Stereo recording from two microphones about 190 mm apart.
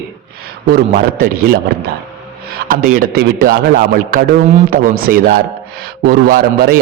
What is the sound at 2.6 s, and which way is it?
A man's voice, 45° right (ahead or behind).